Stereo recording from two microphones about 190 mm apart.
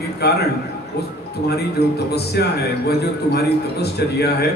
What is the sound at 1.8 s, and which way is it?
A man's voice, 60° left (ahead or behind).